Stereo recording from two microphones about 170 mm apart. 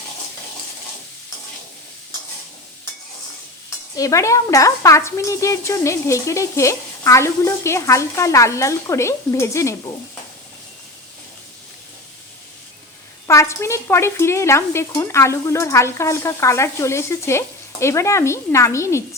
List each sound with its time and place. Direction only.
3.9 s a woman's voice: 20° left (ahead or behind)
13.2 s a woman's voice: 15° left (ahead or behind)